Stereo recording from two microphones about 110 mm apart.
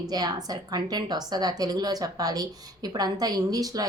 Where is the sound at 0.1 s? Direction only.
35° right (ahead or behind).